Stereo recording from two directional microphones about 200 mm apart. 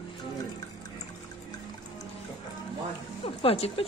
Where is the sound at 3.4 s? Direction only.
30° left (ahead or behind).